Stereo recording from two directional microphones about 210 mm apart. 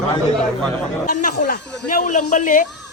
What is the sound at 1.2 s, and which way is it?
Speech, 40° left (ahead or behind).